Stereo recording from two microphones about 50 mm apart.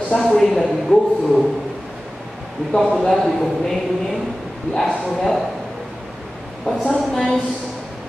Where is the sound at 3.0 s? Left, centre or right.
Centre.